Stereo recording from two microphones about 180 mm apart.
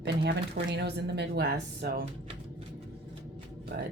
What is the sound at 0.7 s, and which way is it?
A woman's voice, 65° right (ahead or behind).